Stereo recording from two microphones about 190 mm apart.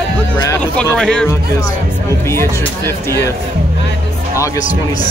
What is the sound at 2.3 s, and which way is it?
Speech, 15° left (ahead or behind).